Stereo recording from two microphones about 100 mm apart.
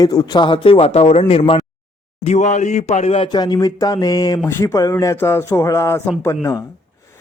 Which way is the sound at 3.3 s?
45° left (ahead or behind).